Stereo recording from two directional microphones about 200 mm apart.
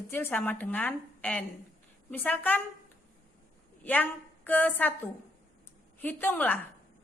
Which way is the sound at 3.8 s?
10° left (ahead or behind).